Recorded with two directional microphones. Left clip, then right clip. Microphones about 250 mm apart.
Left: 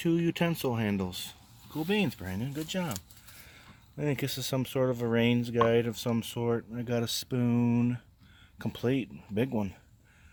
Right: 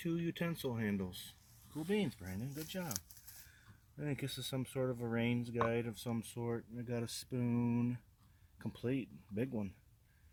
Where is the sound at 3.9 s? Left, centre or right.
Centre.